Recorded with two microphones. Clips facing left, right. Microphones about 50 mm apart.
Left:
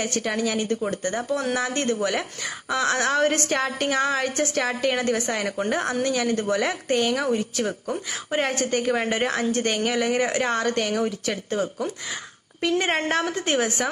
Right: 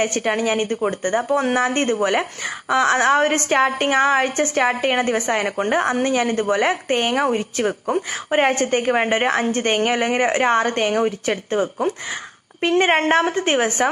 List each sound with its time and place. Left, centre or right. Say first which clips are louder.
0.0 s speech: right 5 dB; right